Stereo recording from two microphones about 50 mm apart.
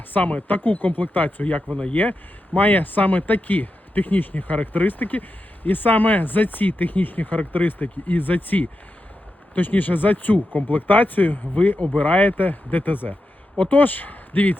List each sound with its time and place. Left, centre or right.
0.1 s speech: left
2.6 s speech: left